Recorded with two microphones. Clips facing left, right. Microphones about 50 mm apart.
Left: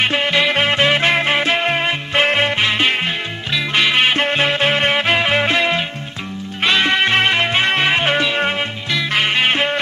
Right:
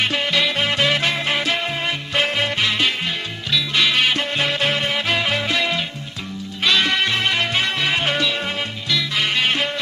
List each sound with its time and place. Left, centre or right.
0.0 s music: left
1.6 s music: left